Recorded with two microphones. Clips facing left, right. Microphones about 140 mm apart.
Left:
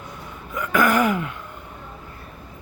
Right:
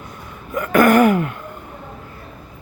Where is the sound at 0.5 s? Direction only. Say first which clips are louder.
Right 6 dB; 60° right (ahead or behind).